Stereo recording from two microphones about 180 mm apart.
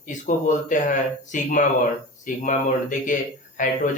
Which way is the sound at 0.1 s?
45° left (ahead or behind).